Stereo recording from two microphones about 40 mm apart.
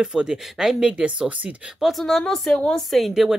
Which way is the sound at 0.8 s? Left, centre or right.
Right.